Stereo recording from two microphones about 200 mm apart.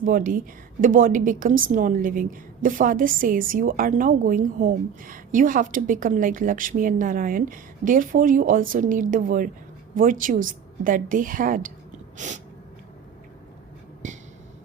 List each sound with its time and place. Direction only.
0.0 s a woman's voice: 40° right (ahead or behind)
12.1 s sneeze: 35° right (ahead or behind)
14.0 s a sound: 40° right (ahead or behind)